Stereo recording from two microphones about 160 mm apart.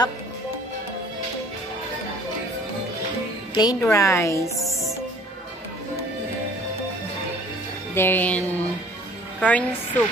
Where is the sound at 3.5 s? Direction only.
20° left (ahead or behind).